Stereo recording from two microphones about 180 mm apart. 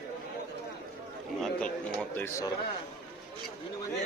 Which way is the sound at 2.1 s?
10° left (ahead or behind).